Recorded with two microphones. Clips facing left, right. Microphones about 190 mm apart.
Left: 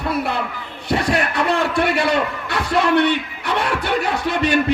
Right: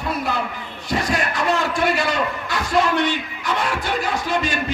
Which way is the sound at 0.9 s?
65° left (ahead or behind).